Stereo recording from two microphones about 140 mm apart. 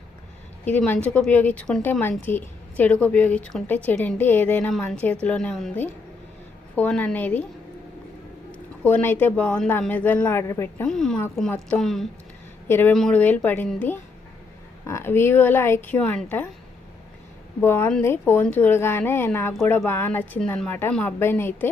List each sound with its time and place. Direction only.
0.6 s a woman's voice: 10° left (ahead or behind)
6.7 s a woman's voice: 10° left (ahead or behind)
8.5 s a woman's voice: 10° left (ahead or behind)
10.8 s speech: 5° left (ahead or behind)
12.6 s speech: 15° left (ahead or behind)
12.9 s a woman's voice: 5° left (ahead or behind)
17.6 s a woman's voice: 15° left (ahead or behind)